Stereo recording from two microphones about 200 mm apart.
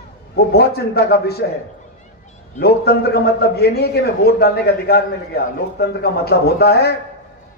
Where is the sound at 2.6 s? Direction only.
50° left (ahead or behind).